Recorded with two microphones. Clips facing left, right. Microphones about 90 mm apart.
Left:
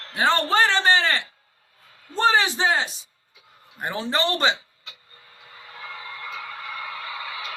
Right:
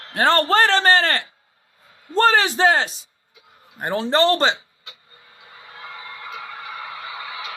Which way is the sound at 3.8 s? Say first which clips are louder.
Right 6 dB; 35° right (ahead or behind).